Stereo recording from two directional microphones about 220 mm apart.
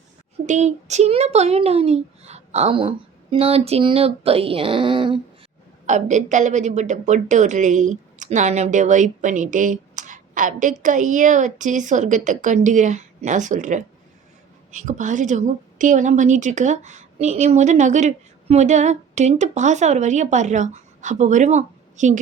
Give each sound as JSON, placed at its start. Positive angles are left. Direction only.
{"t": 0.4, "sound": "speech", "side_deg": -30}
{"t": 5.8, "sound": "a woman's voice", "side_deg": -35}